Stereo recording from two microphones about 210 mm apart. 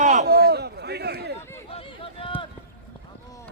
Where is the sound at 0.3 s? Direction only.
50° right (ahead or behind).